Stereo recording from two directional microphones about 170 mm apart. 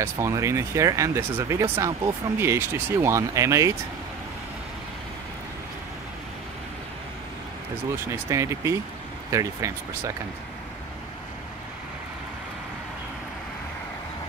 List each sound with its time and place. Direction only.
0.0 s speech: 15° right (ahead or behind)
8.3 s speech: 15° right (ahead or behind)